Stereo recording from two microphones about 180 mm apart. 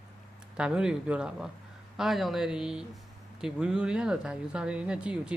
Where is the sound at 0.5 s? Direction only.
5° right (ahead or behind).